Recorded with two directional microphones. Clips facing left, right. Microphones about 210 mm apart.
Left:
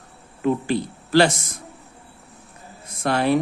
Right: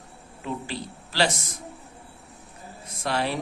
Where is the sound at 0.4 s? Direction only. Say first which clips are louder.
Left 11 dB; 50° left (ahead or behind).